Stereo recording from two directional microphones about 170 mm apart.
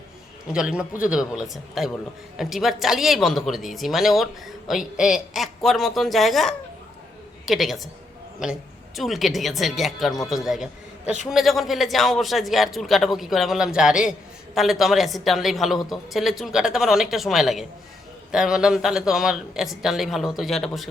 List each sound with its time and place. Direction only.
0.5 s a man's voice: 5° right (ahead or behind)
9.0 s a man's voice: centre (ahead or behind)